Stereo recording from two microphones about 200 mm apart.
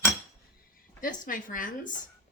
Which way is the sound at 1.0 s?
45° left (ahead or behind).